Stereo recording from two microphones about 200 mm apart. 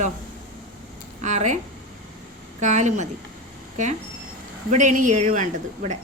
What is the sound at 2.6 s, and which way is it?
Speech, 35° right (ahead or behind).